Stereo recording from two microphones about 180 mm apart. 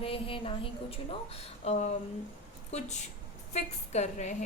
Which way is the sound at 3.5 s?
40° left (ahead or behind).